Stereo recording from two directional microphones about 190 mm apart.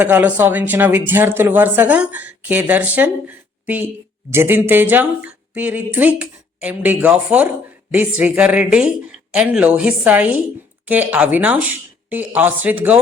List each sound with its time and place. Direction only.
0.0 s a woman's voice: 10° right (ahead or behind)